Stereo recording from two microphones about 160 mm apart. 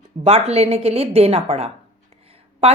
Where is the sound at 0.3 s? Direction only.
40° right (ahead or behind).